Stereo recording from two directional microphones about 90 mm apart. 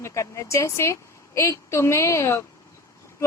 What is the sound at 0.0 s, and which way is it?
Speech, 35° left (ahead or behind).